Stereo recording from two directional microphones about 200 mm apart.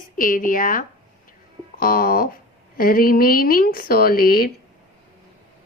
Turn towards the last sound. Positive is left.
turn(degrees=50)  # may be behind; listen again after turning